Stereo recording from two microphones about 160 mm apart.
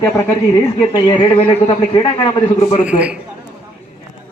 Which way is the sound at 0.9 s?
30° left (ahead or behind).